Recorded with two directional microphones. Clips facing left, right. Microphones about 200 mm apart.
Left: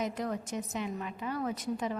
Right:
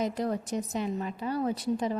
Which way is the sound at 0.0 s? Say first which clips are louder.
Right 4 dB; 35° right (ahead or behind).